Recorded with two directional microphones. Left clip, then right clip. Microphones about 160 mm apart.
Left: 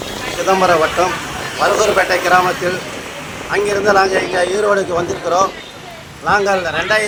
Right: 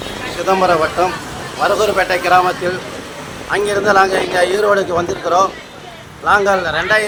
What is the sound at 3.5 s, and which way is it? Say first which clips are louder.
A man's voice: right 1 dB; 5° right (ahead or behind).